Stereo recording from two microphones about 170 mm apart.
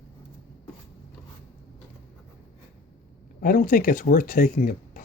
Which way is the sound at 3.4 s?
60° left (ahead or behind).